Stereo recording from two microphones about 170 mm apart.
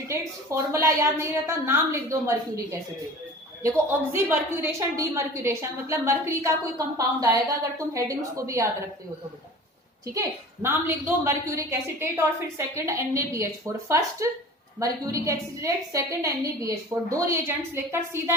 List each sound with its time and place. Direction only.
0.1 s a woman's voice: 15° right (ahead or behind)
3.6 s a woman's voice: 15° right (ahead or behind)
10.2 s a woman's voice: 15° right (ahead or behind)